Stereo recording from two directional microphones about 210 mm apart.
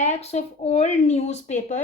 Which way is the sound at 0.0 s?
30° left (ahead or behind).